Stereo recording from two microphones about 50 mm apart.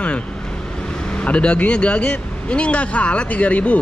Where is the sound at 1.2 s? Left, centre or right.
Left.